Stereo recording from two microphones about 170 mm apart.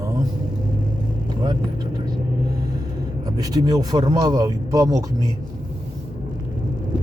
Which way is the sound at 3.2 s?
20° right (ahead or behind).